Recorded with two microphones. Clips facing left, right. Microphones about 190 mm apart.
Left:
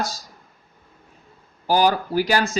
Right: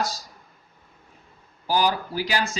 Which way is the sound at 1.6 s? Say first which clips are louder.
Left 4 dB; 55° left (ahead or behind).